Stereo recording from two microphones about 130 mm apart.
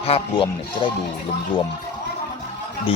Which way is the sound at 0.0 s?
50° left (ahead or behind).